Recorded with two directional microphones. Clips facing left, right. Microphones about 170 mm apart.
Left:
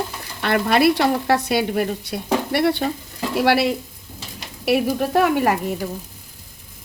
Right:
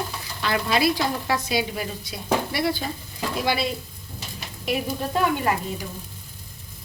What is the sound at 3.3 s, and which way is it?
A woman's voice, 70° left (ahead or behind).